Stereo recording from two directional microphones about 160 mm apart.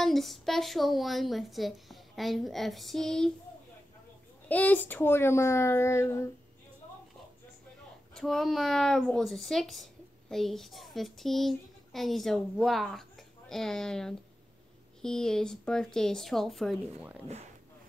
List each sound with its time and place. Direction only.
0.0 s a woman's voice: centre (ahead or behind)
4.5 s speech: 10° left (ahead or behind)
8.1 s a woman's voice: centre (ahead or behind)